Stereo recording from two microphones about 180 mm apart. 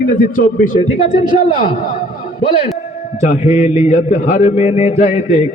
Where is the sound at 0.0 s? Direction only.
50° left (ahead or behind).